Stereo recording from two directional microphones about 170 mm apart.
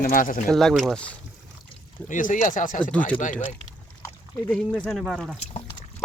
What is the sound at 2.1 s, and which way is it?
Speech, 50° left (ahead or behind).